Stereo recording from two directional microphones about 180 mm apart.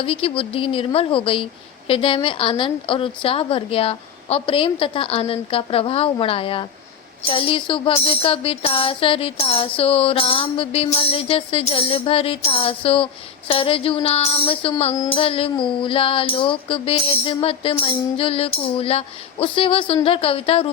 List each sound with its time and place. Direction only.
0.0 s music: 30° left (ahead or behind)
1.9 s a woman's voice: 30° left (ahead or behind)
7.3 s music: 30° left (ahead or behind)